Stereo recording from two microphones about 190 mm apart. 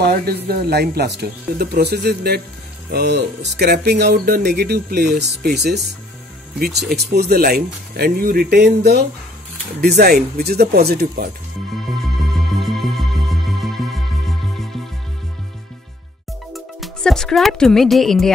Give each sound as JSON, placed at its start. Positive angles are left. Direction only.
{"t": 0.0, "sound": "speech", "side_deg": -55}
{"t": 12.0, "sound": "music", "side_deg": 0}
{"t": 16.5, "sound": "speech", "side_deg": 0}